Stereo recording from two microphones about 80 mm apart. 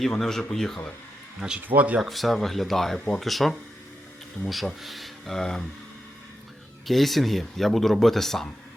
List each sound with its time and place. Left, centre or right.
0.0 s speech: centre
1.6 s speech: centre
2.0 s speech: centre
6.8 s speech: centre